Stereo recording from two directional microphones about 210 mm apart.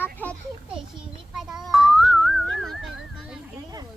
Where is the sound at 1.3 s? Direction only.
Centre (ahead or behind).